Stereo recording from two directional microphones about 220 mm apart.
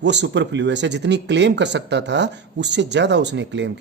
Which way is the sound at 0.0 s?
50° right (ahead or behind).